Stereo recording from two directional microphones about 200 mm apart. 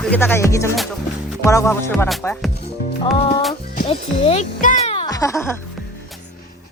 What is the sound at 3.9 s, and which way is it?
Speech, 30° left (ahead or behind).